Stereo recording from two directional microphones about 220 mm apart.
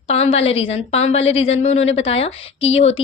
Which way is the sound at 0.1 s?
30° left (ahead or behind).